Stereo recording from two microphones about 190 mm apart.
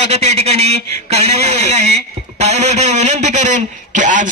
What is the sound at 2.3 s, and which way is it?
Speech, 35° right (ahead or behind).